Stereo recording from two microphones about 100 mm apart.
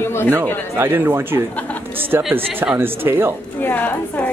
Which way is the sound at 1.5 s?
15° left (ahead or behind).